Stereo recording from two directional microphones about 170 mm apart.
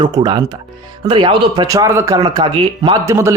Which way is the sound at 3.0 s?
15° right (ahead or behind).